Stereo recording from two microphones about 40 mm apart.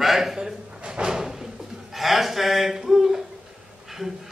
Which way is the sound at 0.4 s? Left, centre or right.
Centre.